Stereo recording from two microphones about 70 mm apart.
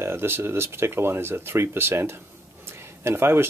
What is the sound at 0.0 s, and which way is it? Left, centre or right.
Speech, right.